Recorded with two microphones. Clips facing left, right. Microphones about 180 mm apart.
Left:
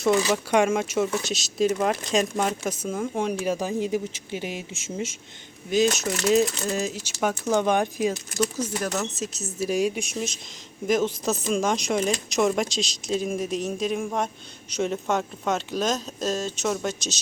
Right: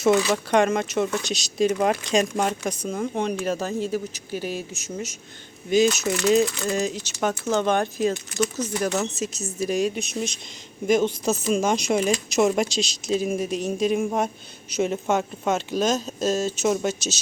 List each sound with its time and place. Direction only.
0.0 s speech: 5° left (ahead or behind)
2.5 s speech: 5° left (ahead or behind); by 5.1 s 25° left (ahead or behind)
5.7 s speech: centre (ahead or behind)
8.8 s speech: centre (ahead or behind)